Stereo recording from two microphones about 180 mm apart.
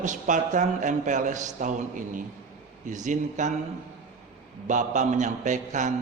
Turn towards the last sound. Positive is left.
turn(degrees=-40)  # may be behind; listen again after turning